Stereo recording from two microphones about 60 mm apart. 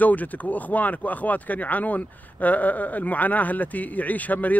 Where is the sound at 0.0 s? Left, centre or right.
Left.